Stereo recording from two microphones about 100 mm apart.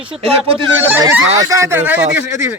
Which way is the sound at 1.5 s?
25° right (ahead or behind).